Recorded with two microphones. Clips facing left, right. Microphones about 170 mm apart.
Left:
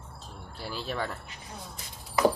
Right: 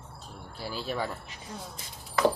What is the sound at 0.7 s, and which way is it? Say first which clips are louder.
Speech: right 1 dB; 5° right (ahead or behind).